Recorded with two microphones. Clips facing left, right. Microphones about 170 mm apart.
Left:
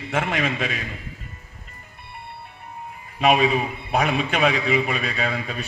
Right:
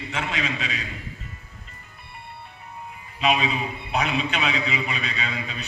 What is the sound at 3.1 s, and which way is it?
A man's voice, 50° left (ahead or behind).